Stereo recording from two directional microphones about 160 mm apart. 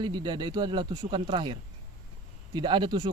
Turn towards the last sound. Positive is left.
turn(degrees=-30)  # may be behind; listen again after turning